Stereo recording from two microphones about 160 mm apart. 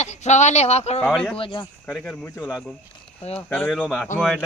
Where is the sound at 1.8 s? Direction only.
10° left (ahead or behind).